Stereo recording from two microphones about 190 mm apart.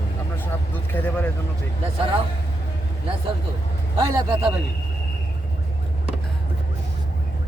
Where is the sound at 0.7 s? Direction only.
10° left (ahead or behind).